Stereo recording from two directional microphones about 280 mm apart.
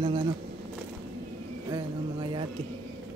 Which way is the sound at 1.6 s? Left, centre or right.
Centre.